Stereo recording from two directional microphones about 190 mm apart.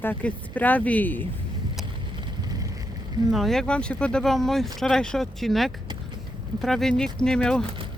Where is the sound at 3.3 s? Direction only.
Centre (ahead or behind).